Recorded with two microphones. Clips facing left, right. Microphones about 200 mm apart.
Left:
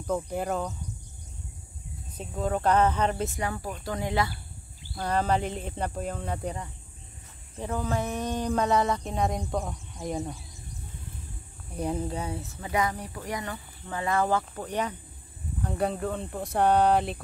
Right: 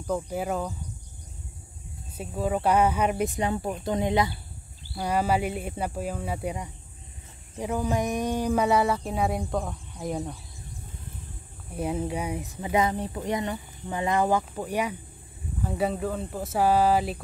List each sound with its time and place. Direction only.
0.0 s speech: centre (ahead or behind)
2.1 s speech: 5° right (ahead or behind)
11.7 s speech: 5° right (ahead or behind)